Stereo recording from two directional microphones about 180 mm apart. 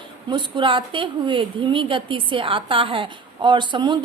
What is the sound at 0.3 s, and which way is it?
A woman's voice, 25° right (ahead or behind).